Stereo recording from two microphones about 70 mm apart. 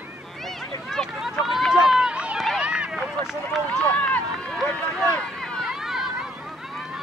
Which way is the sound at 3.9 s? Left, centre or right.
Centre.